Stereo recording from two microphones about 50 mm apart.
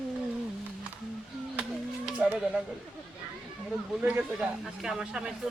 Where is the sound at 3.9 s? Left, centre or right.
Right.